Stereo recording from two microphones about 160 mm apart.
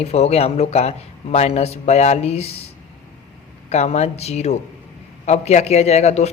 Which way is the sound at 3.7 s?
45° left (ahead or behind).